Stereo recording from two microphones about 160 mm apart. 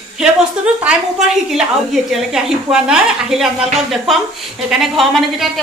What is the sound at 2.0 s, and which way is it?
A woman's voice, 5° right (ahead or behind).